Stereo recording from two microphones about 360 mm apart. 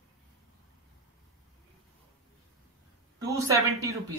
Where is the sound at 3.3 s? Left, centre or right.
Centre.